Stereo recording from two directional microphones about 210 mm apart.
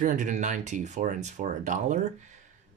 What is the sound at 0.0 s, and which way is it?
Speech, 35° right (ahead or behind).